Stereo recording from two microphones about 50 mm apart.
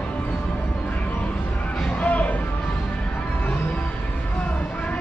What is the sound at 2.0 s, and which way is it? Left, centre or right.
Music, left.